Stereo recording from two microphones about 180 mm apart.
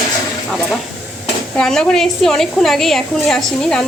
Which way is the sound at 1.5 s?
5° left (ahead or behind).